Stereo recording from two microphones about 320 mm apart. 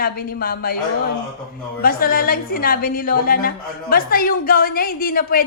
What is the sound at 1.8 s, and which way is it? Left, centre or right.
Speech, left.